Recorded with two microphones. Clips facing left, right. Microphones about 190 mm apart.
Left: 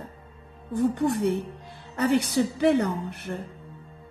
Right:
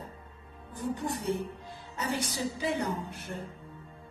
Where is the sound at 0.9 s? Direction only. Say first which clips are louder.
Left 8 dB; 60° left (ahead or behind).